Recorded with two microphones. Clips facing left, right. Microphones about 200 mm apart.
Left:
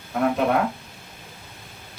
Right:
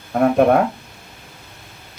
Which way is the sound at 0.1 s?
55° right (ahead or behind).